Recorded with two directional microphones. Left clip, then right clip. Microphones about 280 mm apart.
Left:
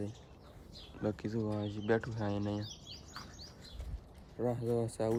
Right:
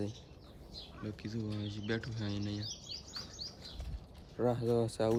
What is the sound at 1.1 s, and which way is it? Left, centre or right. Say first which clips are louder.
Speech: left 8 dB; centre.